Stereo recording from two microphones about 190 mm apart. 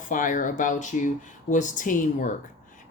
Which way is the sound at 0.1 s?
45° left (ahead or behind).